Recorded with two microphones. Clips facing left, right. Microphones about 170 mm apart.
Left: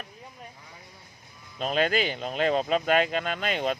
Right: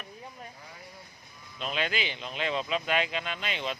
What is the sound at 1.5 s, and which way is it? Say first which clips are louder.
Speech: left 7 dB; 40° left (ahead or behind).